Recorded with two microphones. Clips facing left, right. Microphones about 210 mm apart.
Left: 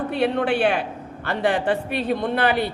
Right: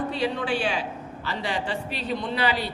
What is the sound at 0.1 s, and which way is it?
A man's voice, 60° left (ahead or behind).